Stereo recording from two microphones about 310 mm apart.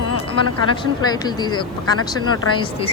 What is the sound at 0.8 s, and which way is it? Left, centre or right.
Speech, centre.